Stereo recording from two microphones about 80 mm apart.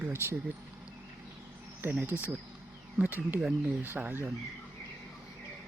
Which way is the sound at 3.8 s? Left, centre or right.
Right.